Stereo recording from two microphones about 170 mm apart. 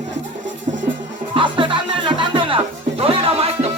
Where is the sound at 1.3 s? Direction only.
30° right (ahead or behind).